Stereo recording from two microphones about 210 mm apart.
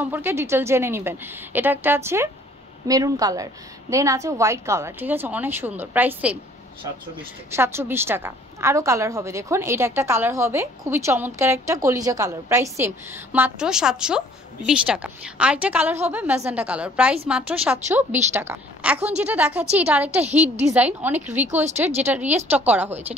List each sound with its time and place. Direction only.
0.0 s a woman's voice: 10° right (ahead or behind)
7.5 s a woman's voice: 10° right (ahead or behind)